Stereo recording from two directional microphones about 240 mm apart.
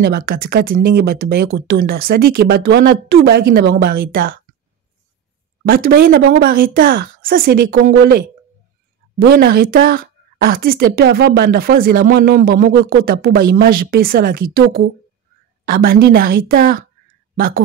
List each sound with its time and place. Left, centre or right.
0.0 s a woman's voice: right
5.7 s a woman's voice: right